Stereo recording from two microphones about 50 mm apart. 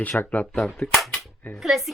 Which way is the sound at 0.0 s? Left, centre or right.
Left.